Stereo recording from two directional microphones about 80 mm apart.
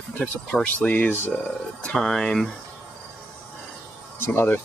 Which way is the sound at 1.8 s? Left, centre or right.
Centre.